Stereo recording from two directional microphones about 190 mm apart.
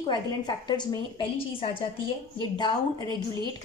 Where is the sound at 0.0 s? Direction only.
20° left (ahead or behind).